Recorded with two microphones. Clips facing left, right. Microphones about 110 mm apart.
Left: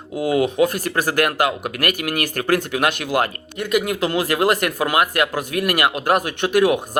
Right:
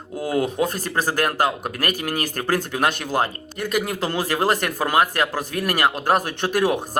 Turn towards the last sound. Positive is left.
turn(degrees=-35)  # may be behind; listen again after turning